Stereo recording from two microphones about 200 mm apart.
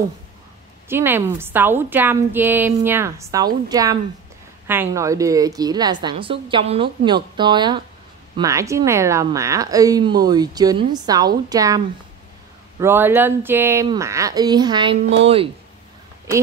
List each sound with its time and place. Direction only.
0.8 s a woman's voice: 10° right (ahead or behind); by 15.5 s 30° right (ahead or behind)